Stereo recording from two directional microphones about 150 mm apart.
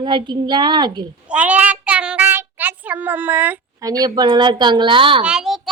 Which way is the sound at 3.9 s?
25° right (ahead or behind).